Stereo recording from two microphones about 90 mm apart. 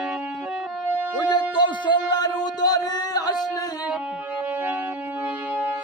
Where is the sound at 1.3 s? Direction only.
55° left (ahead or behind).